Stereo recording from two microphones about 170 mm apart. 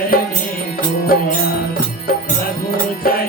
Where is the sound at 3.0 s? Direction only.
60° left (ahead or behind).